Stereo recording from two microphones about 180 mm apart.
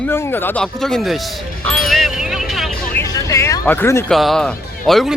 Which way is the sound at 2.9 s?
20° left (ahead or behind).